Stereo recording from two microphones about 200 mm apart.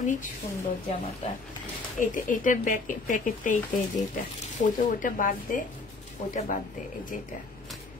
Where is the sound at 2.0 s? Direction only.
40° left (ahead or behind).